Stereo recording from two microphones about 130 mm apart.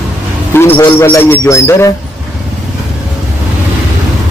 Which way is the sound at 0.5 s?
15° left (ahead or behind).